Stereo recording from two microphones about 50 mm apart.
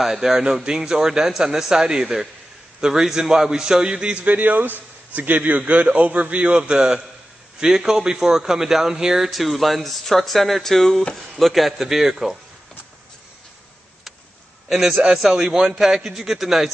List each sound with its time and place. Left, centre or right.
0.0 s a man's voice: centre; by 6.6 s right
6.7 s speech: centre
9.3 s speech: centre
14.7 s speech: centre